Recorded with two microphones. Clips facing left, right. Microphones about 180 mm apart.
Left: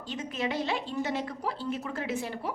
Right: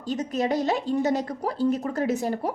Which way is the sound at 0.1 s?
40° right (ahead or behind).